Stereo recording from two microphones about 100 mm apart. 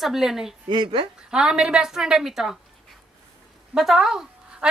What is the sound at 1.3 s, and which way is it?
A woman's voice, 5° right (ahead or behind).